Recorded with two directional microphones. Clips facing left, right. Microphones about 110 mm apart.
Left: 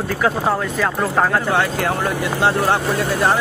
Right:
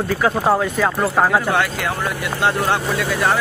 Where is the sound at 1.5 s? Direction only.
25° left (ahead or behind).